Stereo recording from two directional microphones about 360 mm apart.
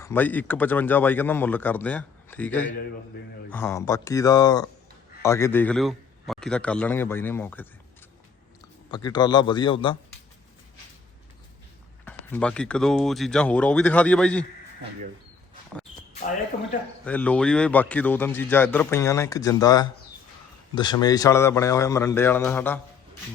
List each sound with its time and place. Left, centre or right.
0.0 s a man's voice: centre
8.9 s a man's voice: centre
12.0 s speech: centre
16.5 s speech: centre
17.1 s a man's voice: centre